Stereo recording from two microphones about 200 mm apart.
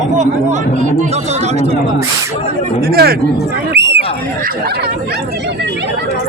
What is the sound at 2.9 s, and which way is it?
Speech, 50° right (ahead or behind).